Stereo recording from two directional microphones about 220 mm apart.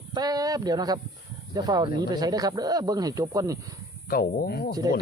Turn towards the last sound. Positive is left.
turn(degrees=45)  # may be behind; listen again after turning